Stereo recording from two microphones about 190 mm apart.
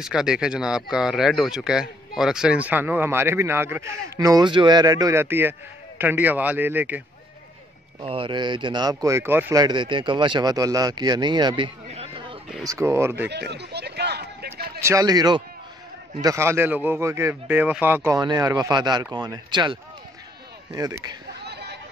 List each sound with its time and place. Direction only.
0.0 s speech: 5° right (ahead or behind)
8.0 s speech: 30° right (ahead or behind)
12.6 s speech: 15° right (ahead or behind)
13.3 s a sound: 60° right (ahead or behind)
14.8 s speech: 15° right (ahead or behind)
21.4 s chatter: 60° right (ahead or behind)